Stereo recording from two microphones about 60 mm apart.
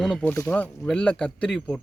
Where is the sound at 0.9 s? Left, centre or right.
Centre.